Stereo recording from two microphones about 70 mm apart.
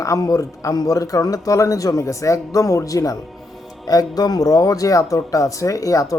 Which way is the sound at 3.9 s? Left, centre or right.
Left.